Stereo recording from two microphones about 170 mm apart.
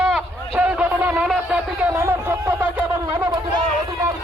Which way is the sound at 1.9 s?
15° right (ahead or behind).